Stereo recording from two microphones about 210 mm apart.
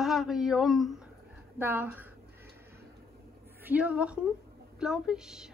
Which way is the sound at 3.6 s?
5° right (ahead or behind).